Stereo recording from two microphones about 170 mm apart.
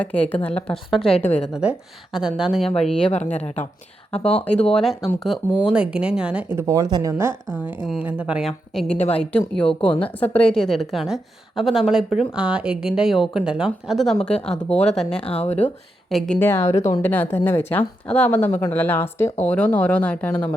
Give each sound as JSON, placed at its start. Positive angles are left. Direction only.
{"t": 0.0, "sound": "a woman's voice", "side_deg": 10}
{"t": 3.1, "sound": "speech", "side_deg": 40}
{"t": 4.8, "sound": "a woman's voice", "side_deg": 0}
{"t": 6.6, "sound": "speech", "side_deg": -20}
{"t": 7.9, "sound": "a woman's voice", "side_deg": -5}
{"t": 9.0, "sound": "speech", "side_deg": 40}
{"t": 9.6, "sound": "a woman's voice", "side_deg": 5}
{"t": 14.8, "sound": "speech", "side_deg": 40}
{"t": 16.0, "sound": "a woman's voice", "side_deg": 0}